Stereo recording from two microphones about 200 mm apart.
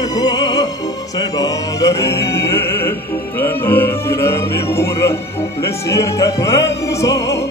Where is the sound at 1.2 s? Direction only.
15° left (ahead or behind).